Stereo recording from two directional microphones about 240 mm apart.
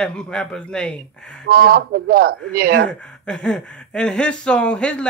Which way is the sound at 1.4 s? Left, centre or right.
Right.